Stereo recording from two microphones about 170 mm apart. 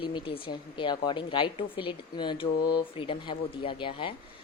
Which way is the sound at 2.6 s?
70° left (ahead or behind).